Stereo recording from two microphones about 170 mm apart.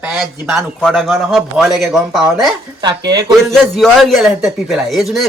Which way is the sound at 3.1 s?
25° right (ahead or behind).